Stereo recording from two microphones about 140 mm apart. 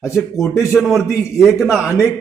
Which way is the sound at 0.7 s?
5° right (ahead or behind).